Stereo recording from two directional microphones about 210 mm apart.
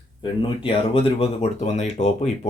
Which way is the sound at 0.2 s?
25° left (ahead or behind).